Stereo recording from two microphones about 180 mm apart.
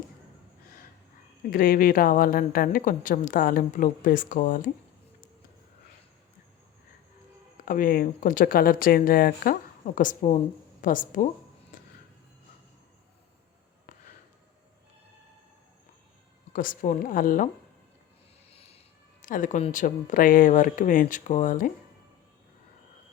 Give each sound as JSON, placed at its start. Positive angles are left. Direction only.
{"t": 1.5, "sound": "a woman's voice", "side_deg": 55}
{"t": 7.6, "sound": "a woman's voice", "side_deg": 50}
{"t": 16.5, "sound": "a woman's voice", "side_deg": 50}
{"t": 19.2, "sound": "a woman's voice", "side_deg": 45}